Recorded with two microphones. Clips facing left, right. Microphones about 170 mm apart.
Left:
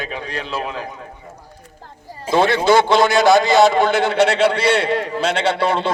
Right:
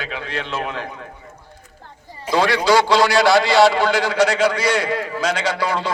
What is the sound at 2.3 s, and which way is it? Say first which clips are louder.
A man's voice: left 2 dB; 25° left (ahead or behind).